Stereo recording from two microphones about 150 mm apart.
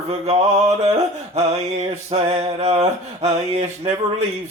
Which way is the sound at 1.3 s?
45° right (ahead or behind).